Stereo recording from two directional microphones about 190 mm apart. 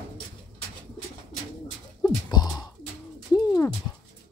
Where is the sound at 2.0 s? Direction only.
20° left (ahead or behind).